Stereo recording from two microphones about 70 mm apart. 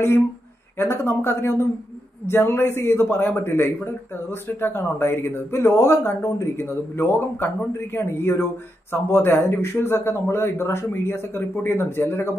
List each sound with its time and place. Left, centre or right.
0.7 s a man's voice: left